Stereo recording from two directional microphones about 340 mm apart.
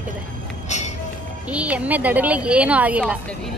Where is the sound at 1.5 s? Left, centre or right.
Centre.